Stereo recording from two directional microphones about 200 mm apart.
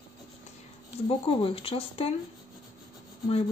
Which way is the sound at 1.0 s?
25° left (ahead or behind).